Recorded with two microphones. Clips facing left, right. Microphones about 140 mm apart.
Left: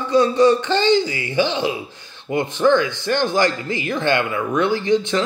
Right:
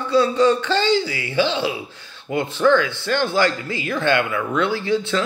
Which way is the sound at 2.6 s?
25° left (ahead or behind).